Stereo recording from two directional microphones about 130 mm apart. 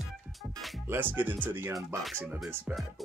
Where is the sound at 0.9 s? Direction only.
15° right (ahead or behind).